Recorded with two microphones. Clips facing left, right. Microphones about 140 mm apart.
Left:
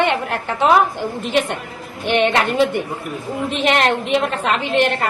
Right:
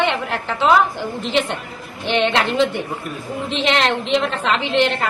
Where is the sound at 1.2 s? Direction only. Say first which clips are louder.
Left 1 dB; 50° left (ahead or behind).